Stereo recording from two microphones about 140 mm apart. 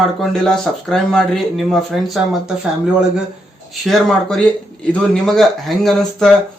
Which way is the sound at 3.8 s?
Centre (ahead or behind).